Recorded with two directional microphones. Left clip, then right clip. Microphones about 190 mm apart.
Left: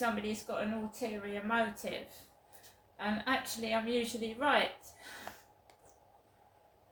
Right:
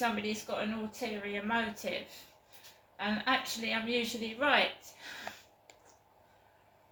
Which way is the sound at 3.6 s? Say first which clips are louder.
Even; 20° left (ahead or behind).